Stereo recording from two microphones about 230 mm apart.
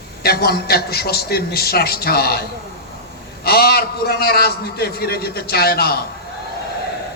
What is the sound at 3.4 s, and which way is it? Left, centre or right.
A man's voice, left.